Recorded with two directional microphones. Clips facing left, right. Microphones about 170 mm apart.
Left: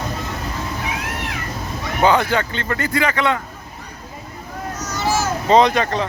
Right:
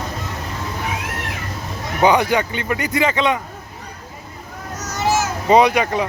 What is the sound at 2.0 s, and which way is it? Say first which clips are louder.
Speech: right 1 dB; 15° right (ahead or behind).